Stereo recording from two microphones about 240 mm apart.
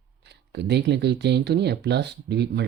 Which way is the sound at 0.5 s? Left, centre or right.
Right.